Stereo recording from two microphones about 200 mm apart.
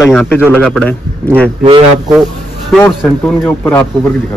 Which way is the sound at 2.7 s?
10° left (ahead or behind).